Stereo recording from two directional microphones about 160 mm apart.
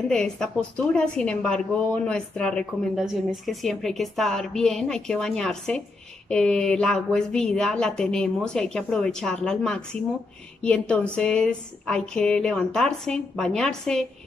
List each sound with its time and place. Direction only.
0.1 s a woman's voice: 5° left (ahead or behind)